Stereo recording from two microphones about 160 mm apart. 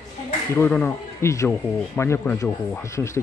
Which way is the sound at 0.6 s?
10° left (ahead or behind).